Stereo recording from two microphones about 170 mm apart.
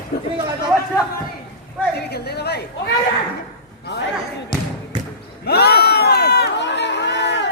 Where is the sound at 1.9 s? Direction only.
70° left (ahead or behind).